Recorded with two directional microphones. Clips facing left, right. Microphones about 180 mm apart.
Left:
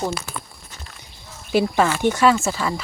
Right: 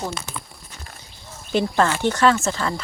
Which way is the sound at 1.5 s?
10° left (ahead or behind).